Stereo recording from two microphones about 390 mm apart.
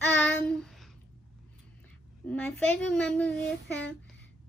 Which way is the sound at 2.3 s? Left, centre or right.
Centre.